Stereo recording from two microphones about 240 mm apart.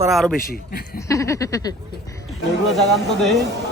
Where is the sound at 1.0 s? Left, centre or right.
Centre.